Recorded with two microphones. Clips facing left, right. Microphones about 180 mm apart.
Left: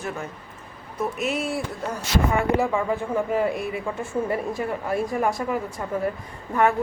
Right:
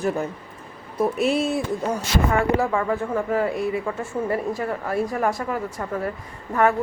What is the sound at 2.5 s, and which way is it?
Speech, 15° left (ahead or behind).